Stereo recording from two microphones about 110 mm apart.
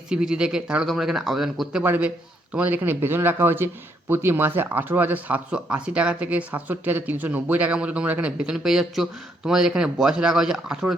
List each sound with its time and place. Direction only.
0.1 s speech: 5° right (ahead or behind)
1.8 s a man's voice: 15° right (ahead or behind)